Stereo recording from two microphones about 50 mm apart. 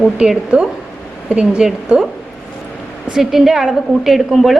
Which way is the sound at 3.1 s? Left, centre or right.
Centre.